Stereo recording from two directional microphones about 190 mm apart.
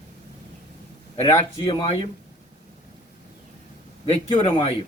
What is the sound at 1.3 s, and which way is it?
Speech, 30° left (ahead or behind).